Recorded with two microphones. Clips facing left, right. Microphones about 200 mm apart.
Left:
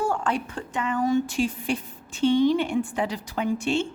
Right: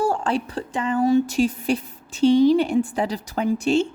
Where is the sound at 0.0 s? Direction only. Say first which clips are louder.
Right 4 dB; 30° right (ahead or behind).